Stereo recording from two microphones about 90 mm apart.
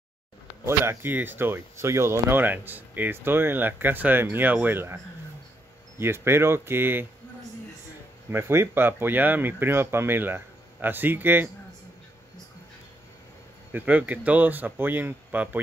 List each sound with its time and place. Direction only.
0.7 s speech: 25° right (ahead or behind)
8.3 s speech: 30° right (ahead or behind)
13.7 s speech: 20° right (ahead or behind)